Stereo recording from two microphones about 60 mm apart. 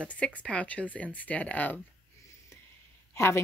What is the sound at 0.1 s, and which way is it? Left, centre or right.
Speech, left.